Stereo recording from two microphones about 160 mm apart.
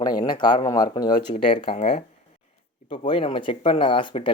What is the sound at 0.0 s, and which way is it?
Speech, 25° left (ahead or behind).